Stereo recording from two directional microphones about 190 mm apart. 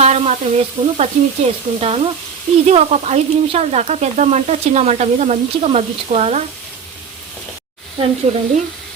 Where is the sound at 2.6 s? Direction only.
35° right (ahead or behind).